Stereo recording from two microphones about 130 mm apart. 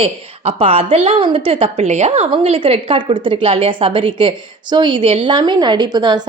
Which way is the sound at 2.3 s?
45° right (ahead or behind).